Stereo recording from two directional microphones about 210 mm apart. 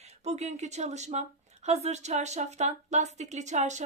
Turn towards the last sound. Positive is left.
turn(degrees=-35)  # may be behind; listen again after turning